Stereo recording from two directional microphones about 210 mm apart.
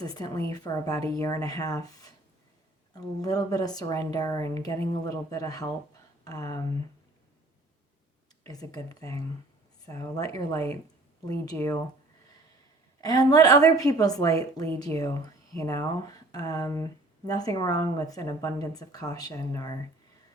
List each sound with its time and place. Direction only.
0.0 s speech: 20° left (ahead or behind)
8.4 s speech: 15° left (ahead or behind)
13.0 s speech: 15° left (ahead or behind)